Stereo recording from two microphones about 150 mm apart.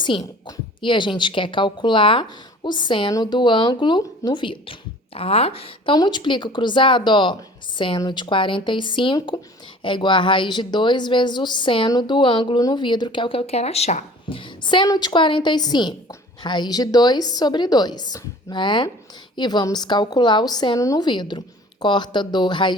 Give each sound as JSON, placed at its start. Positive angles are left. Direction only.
{"t": 0.4, "sound": "a woman's voice", "side_deg": 30}